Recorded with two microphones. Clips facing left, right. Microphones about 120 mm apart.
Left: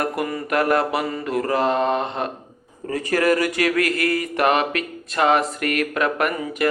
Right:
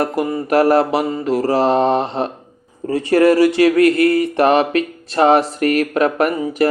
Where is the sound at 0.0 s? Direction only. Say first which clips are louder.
Right 5 dB; 25° right (ahead or behind).